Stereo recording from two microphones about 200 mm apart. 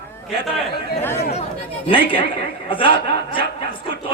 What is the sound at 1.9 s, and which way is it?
A man's voice, 25° left (ahead or behind).